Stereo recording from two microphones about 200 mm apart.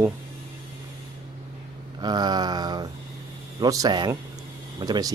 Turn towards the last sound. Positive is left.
turn(degrees=-20)  # may be behind; listen again after turning